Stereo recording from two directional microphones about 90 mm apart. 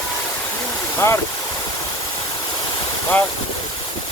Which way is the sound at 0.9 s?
30° left (ahead or behind).